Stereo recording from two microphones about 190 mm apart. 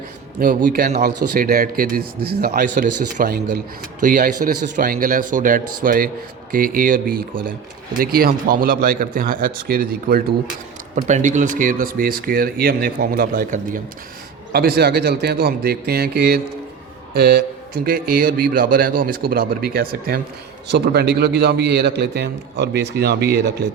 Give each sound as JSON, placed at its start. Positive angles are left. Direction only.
{"t": 0.3, "sound": "a man's voice", "side_deg": -50}
{"t": 2.5, "sound": "speech", "side_deg": -45}
{"t": 10.9, "sound": "a man's voice", "side_deg": -40}